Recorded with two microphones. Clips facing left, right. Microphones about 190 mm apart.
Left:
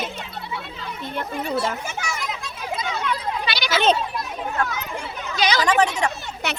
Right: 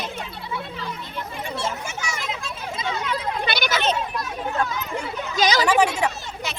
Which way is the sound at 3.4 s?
50° right (ahead or behind).